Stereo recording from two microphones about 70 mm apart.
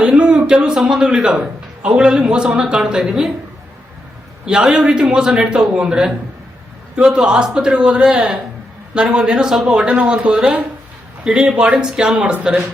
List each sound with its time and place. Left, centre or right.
0.0 s a man's voice: centre
4.4 s a man's voice: centre